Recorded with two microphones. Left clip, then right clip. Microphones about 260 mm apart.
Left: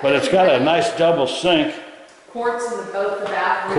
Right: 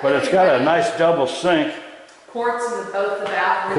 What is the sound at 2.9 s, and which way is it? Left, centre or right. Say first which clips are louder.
Speech: left 1 dB; centre.